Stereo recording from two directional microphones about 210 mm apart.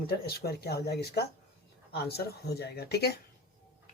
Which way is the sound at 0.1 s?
50° left (ahead or behind).